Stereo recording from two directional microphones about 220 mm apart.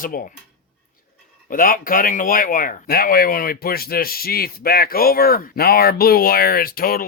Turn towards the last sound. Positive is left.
turn(degrees=40)  # may be behind; listen again after turning